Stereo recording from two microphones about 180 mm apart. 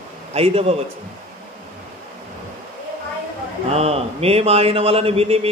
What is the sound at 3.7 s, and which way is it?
A man's voice, 35° right (ahead or behind).